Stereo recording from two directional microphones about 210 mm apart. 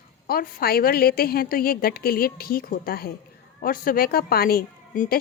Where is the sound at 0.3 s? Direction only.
45° left (ahead or behind).